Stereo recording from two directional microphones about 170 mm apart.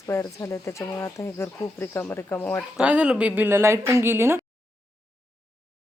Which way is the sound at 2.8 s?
5° right (ahead or behind).